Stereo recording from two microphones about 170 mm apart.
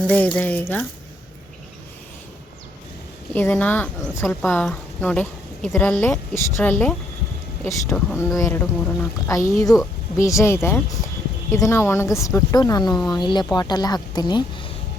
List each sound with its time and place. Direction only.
0.1 s speech: 10° left (ahead or behind)
3.3 s speech: 10° left (ahead or behind); by 14.7 s 25° left (ahead or behind)